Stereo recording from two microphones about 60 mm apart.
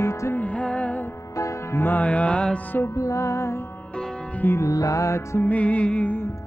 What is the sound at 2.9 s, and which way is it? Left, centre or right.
Music, left.